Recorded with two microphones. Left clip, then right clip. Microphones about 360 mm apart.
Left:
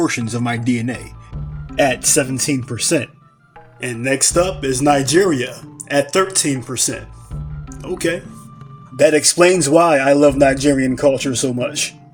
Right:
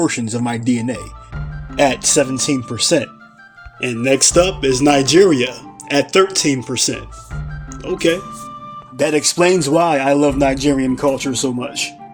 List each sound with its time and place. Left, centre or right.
0.0 s a man's voice: left